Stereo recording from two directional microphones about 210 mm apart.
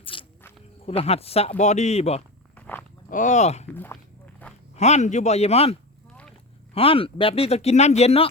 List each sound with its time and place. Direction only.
0.0 s walk: 25° left (ahead or behind)
0.9 s speech: 30° left (ahead or behind)
2.6 s wild animals: 10° left (ahead or behind)
3.1 s speech: 35° left (ahead or behind)
4.8 s speech: 30° left (ahead or behind)
6.7 s speech: 25° left (ahead or behind)